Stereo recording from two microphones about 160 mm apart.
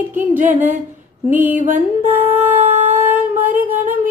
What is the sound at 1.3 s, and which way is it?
Speech, 10° right (ahead or behind).